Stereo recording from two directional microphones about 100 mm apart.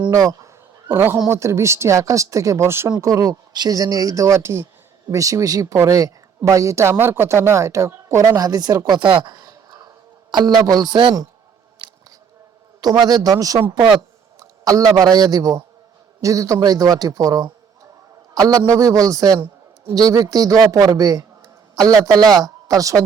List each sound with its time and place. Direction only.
0.1 s a sound: 35° right (ahead or behind)
0.9 s speech: 20° right (ahead or behind)
3.0 s speech: 35° right (ahead or behind); by 9.2 s 55° right (ahead or behind)
9.2 s a sound: 40° right (ahead or behind)
10.3 s speech: 45° right (ahead or behind)
12.8 s speech: 45° right (ahead or behind)